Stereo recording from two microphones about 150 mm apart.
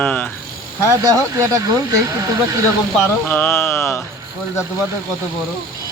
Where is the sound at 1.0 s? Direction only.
25° right (ahead or behind).